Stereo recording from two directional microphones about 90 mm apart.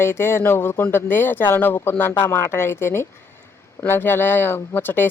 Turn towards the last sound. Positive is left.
turn(degrees=25)  # may be behind; listen again after turning